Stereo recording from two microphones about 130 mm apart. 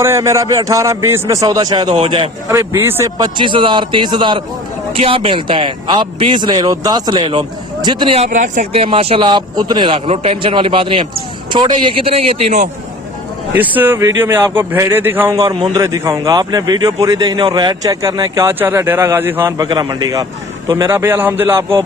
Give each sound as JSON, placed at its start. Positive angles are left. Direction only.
{"t": 0.0, "sound": "a man's voice", "side_deg": -25}
{"t": 2.5, "sound": "a man's voice", "side_deg": -20}
{"t": 3.2, "sound": "a man's voice", "side_deg": -35}
{"t": 8.2, "sound": "speech", "side_deg": -75}
{"t": 8.7, "sound": "a man's voice", "side_deg": -45}
{"t": 13.5, "sound": "speech", "side_deg": -15}
{"t": 15.6, "sound": "a man's voice", "side_deg": -30}
{"t": 19.6, "sound": "a man's voice", "side_deg": -35}